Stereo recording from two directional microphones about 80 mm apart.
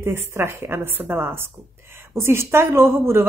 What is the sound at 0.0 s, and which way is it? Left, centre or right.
Speech, right.